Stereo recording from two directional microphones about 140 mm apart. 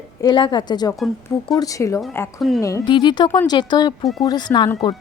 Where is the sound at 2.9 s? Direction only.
35° left (ahead or behind).